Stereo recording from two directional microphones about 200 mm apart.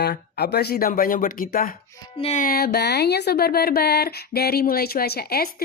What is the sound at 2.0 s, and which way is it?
Music, 30° left (ahead or behind).